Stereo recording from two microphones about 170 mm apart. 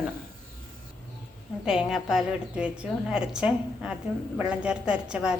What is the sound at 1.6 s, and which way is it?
A woman's voice, 5° right (ahead or behind).